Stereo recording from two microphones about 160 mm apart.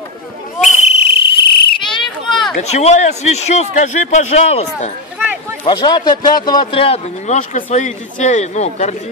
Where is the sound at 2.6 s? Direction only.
45° left (ahead or behind).